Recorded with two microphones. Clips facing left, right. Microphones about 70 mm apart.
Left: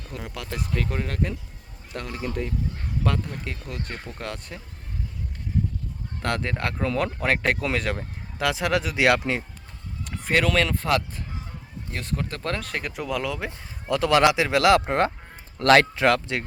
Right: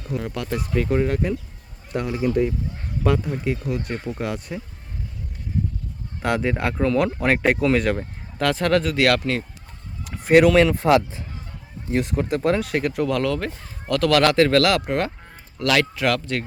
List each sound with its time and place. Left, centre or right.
0.1 s speech: centre
6.2 s speech: centre
9.0 s speech: centre
10.0 s a sound: centre
10.3 s speech: centre
13.8 s speech: centre